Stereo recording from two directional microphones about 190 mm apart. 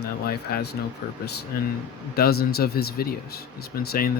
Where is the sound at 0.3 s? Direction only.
55° left (ahead or behind).